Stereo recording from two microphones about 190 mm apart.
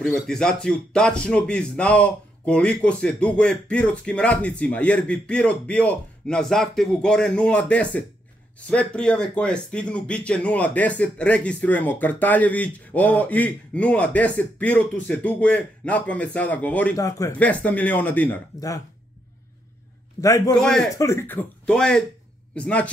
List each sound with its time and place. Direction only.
0.0 s speech: centre (ahead or behind)
20.2 s speech: 15° left (ahead or behind)
20.5 s speech: 5° left (ahead or behind)
21.0 s a man's voice: 15° left (ahead or behind)